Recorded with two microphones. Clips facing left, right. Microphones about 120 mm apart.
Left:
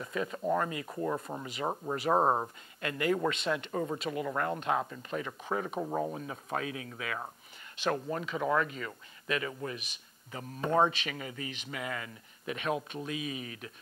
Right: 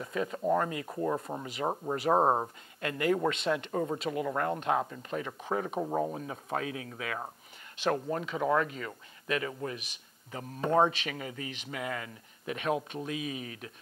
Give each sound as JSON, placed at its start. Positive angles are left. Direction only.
{"t": 0.0, "sound": "speech", "side_deg": -30}
{"t": 2.8, "sound": "speech", "side_deg": -40}
{"t": 10.9, "sound": "speech", "side_deg": -45}